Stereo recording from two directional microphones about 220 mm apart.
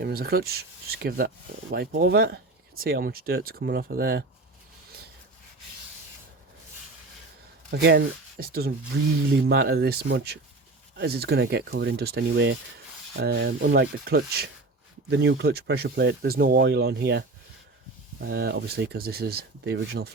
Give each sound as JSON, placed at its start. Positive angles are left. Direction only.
{"t": 0.0, "sound": "speech", "side_deg": -45}
{"t": 7.7, "sound": "speech", "side_deg": -50}